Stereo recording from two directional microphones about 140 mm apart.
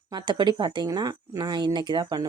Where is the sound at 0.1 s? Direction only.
30° right (ahead or behind).